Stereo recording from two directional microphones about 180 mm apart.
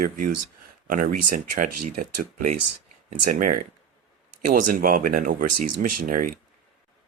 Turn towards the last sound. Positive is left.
turn(degrees=-50)  # may be behind; listen again after turning